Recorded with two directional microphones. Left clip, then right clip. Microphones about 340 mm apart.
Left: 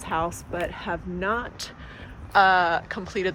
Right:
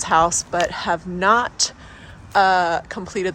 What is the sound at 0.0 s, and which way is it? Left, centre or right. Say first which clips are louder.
Speech: right 11 dB; centre.